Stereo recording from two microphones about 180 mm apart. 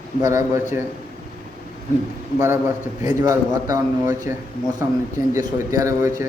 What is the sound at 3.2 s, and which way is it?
A man's voice, 20° right (ahead or behind).